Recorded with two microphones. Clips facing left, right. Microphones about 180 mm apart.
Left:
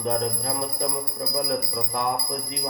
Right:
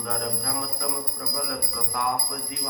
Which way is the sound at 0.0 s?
25° left (ahead or behind).